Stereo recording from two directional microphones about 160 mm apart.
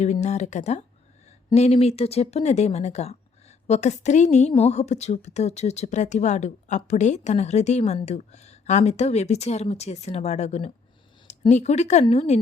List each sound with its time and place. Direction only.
0.0 s a woman's voice: 45° left (ahead or behind)